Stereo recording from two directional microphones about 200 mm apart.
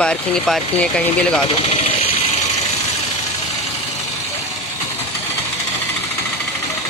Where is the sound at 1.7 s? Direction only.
30° left (ahead or behind).